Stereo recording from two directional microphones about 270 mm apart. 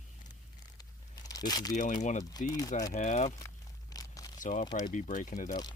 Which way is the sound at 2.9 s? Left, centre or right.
Left.